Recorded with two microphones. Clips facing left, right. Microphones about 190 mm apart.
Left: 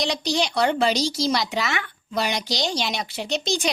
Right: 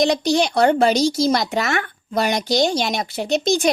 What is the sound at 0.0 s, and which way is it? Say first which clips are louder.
Speech: right 7 dB; 50° right (ahead or behind).